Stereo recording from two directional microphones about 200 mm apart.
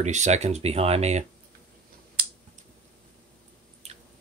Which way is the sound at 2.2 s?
50° right (ahead or behind).